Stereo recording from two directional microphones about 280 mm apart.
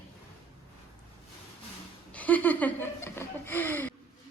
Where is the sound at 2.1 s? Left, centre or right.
Centre.